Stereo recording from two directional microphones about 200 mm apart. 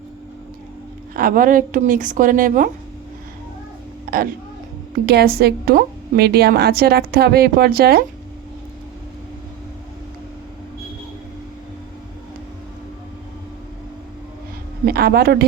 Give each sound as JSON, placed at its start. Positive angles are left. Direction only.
{"t": 1.1, "sound": "a woman's voice", "side_deg": -45}
{"t": 4.1, "sound": "a woman's voice", "side_deg": -45}
{"t": 14.8, "sound": "speech", "side_deg": -50}